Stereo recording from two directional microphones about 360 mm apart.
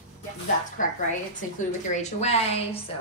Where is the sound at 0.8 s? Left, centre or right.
Left.